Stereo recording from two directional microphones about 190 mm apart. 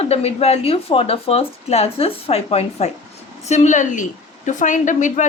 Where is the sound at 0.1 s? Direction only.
30° left (ahead or behind).